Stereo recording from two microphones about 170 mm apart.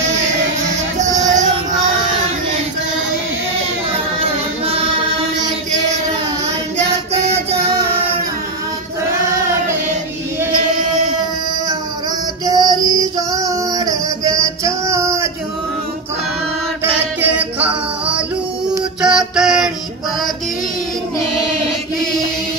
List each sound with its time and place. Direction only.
0.9 s music: 45° right (ahead or behind)
4.2 s music: 35° right (ahead or behind)
12.4 s female singing: 25° right (ahead or behind)
17.2 s music: 10° right (ahead or behind)